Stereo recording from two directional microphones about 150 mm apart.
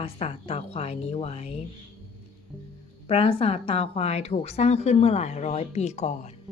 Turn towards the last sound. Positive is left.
turn(degrees=50)  # may be behind; listen again after turning